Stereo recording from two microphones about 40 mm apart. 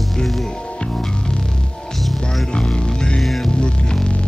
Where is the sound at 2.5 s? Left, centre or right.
Left.